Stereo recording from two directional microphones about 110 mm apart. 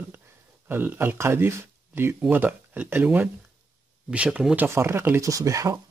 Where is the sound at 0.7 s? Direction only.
20° right (ahead or behind).